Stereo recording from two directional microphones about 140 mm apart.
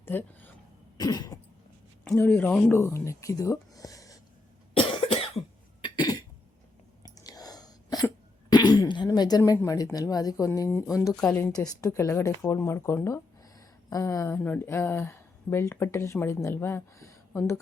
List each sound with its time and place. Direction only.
0.0 s speech: 15° left (ahead or behind)
0.9 s speech: 30° left (ahead or behind)
2.1 s speech: 10° left (ahead or behind)
4.7 s cough: 40° left (ahead or behind)
5.8 s cough: 30° left (ahead or behind)
9.0 s speech: 30° left (ahead or behind)
11.1 s speech: 10° left (ahead or behind)
11.5 s a woman's voice: 25° left (ahead or behind)